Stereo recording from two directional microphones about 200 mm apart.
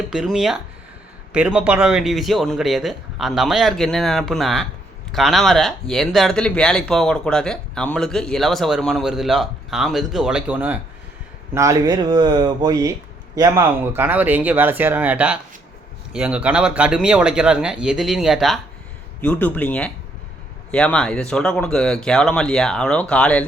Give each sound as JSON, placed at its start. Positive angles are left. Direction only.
{"t": 0.1, "sound": "speech", "side_deg": 0}